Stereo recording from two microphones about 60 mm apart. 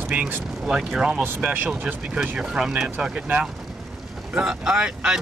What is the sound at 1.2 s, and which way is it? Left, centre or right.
Speech, right.